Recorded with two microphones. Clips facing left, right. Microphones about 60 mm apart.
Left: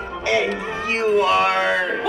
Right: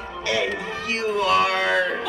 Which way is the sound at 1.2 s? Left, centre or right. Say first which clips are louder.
Left 2 dB; left.